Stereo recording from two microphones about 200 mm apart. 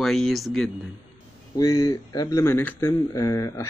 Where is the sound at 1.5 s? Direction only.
15° left (ahead or behind).